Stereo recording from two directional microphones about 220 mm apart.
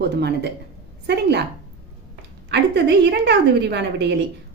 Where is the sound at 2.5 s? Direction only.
50° right (ahead or behind).